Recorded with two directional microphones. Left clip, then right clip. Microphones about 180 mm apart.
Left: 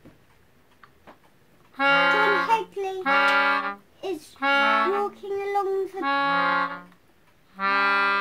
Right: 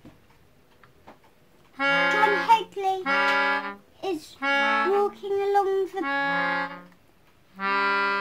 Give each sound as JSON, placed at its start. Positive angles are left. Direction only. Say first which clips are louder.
{"t": 1.8, "sound": "music", "louder": "left 2 dB", "side_deg": 5}
{"t": 2.7, "sound": "music", "louder": "right 4 dB", "side_deg": -35}
{"t": 3.0, "sound": "music", "louder": "left 4 dB", "side_deg": 5}
{"t": 5.0, "sound": "music", "louder": "right 3 dB", "side_deg": -30}
{"t": 5.9, "sound": "accordion", "louder": "left 2 dB", "side_deg": 5}